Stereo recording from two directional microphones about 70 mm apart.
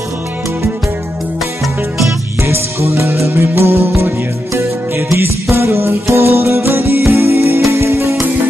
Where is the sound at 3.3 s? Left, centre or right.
Right.